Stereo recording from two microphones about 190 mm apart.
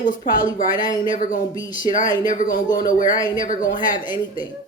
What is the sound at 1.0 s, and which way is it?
Speech, 45° left (ahead or behind).